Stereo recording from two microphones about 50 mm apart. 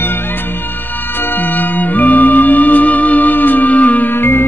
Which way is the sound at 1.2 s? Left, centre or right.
Left.